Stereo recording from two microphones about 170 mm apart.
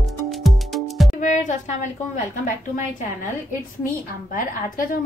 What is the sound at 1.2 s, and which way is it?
Music, 45° left (ahead or behind).